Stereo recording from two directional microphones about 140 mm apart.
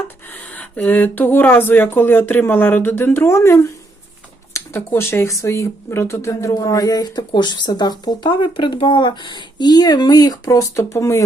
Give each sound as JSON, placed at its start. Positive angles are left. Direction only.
{"t": 0.3, "sound": "speech", "side_deg": 10}